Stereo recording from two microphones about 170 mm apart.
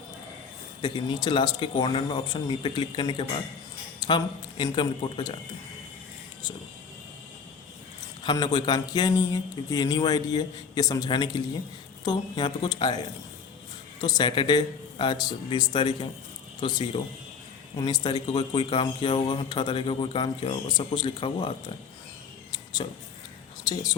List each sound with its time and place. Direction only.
0.8 s a man's voice: 25° left (ahead or behind)
8.2 s a man's voice: 25° left (ahead or behind)
22.5 s a sound: 25° left (ahead or behind)